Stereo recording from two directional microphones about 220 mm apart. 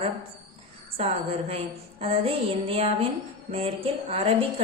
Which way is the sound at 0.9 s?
25° right (ahead or behind).